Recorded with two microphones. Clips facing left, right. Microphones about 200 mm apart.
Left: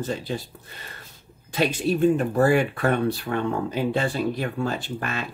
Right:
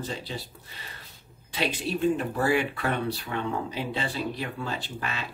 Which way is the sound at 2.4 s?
45° left (ahead or behind).